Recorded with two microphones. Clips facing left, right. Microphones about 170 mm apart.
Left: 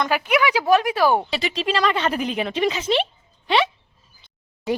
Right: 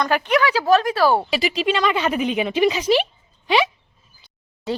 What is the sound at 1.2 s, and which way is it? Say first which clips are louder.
Speech: right 3 dB; 10° right (ahead or behind).